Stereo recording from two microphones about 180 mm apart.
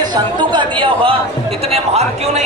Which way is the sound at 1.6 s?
35° right (ahead or behind).